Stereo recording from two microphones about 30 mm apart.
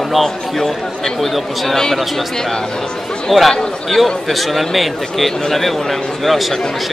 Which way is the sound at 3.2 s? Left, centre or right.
Centre.